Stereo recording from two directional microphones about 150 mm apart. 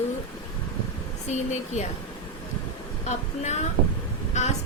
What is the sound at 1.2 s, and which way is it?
Speech, 50° left (ahead or behind).